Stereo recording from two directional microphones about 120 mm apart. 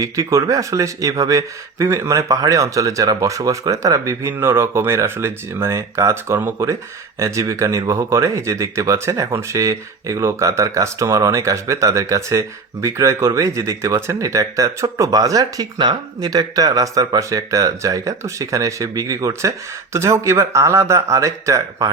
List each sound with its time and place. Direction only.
0.0 s speech: 25° right (ahead or behind)